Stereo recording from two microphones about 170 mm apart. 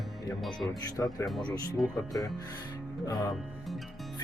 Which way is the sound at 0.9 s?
20° left (ahead or behind).